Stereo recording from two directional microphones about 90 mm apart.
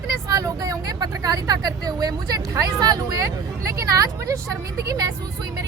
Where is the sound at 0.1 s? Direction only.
45° right (ahead or behind).